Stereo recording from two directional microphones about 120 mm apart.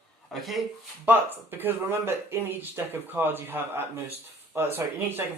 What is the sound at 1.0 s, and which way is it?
Speech, 15° right (ahead or behind).